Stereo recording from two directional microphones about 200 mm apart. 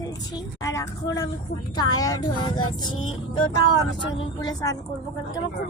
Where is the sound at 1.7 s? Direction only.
20° left (ahead or behind).